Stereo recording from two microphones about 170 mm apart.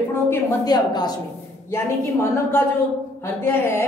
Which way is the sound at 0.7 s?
25° left (ahead or behind).